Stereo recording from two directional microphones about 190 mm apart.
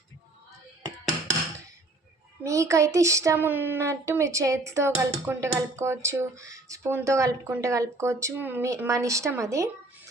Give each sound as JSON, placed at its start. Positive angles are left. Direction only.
{"t": 2.4, "sound": "speech", "side_deg": -15}